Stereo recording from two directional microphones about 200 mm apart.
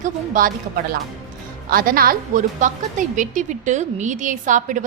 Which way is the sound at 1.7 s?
45° right (ahead or behind).